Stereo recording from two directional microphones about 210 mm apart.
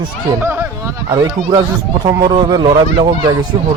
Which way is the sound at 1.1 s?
20° right (ahead or behind).